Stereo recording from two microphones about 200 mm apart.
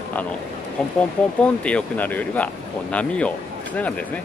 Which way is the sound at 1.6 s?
5° left (ahead or behind).